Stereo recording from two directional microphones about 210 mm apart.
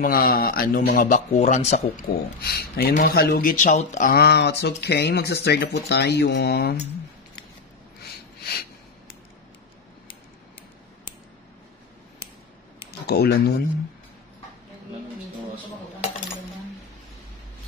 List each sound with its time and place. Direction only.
0.0 s speech: 45° left (ahead or behind)
2.4 s speech: 45° left (ahead or behind)
8.0 s a sound: 50° left (ahead or behind)
13.0 s speech: 50° left (ahead or behind)